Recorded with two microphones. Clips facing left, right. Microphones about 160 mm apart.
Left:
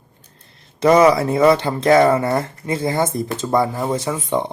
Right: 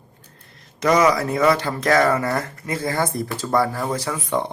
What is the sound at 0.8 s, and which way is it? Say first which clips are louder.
Speech: left 5 dB; 30° left (ahead or behind).